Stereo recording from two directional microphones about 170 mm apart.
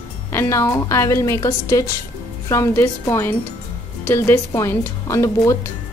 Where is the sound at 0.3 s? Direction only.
15° left (ahead or behind).